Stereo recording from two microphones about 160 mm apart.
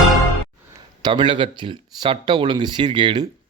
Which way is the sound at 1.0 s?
30° right (ahead or behind).